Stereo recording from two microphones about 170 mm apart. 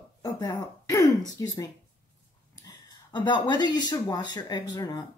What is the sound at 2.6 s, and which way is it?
Speech, 25° left (ahead or behind).